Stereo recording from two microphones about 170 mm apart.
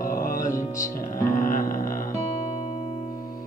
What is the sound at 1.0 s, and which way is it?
Music, 55° left (ahead or behind).